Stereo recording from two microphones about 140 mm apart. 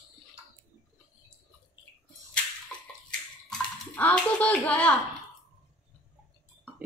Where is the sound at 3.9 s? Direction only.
10° left (ahead or behind).